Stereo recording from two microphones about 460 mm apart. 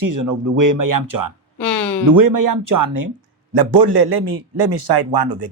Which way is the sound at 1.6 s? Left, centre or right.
Centre.